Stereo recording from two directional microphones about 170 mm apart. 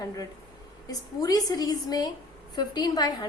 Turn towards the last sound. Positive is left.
turn(degrees=25)  # may be behind; listen again after turning